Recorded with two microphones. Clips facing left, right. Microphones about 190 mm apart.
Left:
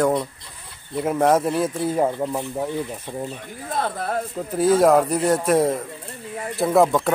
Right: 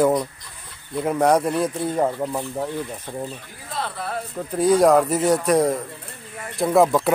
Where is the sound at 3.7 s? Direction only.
50° left (ahead or behind).